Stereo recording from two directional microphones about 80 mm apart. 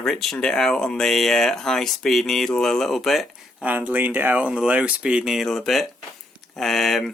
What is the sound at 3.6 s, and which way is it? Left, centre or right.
Speech, right.